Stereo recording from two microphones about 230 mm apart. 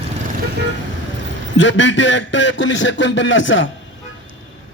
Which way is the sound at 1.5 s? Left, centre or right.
Left.